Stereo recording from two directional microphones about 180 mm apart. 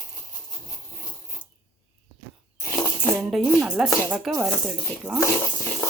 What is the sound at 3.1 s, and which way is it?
Speech, centre (ahead or behind).